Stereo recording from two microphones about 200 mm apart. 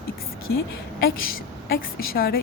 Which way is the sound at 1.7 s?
50° left (ahead or behind).